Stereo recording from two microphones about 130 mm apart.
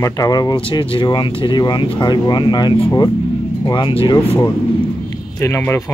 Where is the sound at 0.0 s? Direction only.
30° left (ahead or behind).